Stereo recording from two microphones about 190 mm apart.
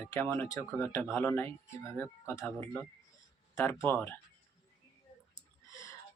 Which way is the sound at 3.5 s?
10° left (ahead or behind).